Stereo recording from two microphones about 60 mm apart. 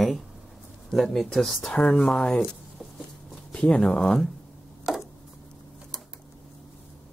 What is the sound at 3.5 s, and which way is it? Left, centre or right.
Speech, centre.